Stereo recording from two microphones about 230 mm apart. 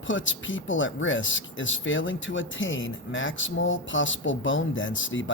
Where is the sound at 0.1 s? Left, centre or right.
Left.